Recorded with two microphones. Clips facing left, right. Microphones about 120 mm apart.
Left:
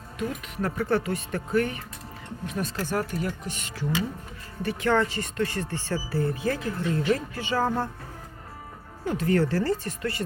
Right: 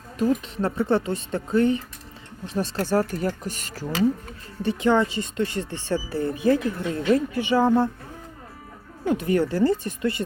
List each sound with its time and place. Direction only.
0.2 s speech: 30° right (ahead or behind)
4.6 s speech: 20° right (ahead or behind)
9.0 s speech: 20° right (ahead or behind)